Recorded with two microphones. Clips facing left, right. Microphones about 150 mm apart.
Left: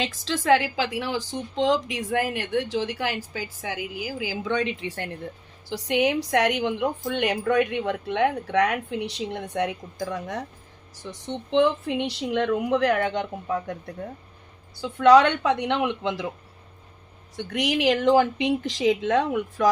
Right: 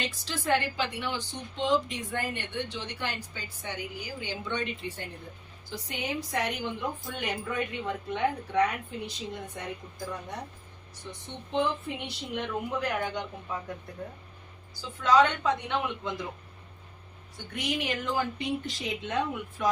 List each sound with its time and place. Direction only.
0.0 s a woman's voice: 90° left
17.3 s a woman's voice: 90° left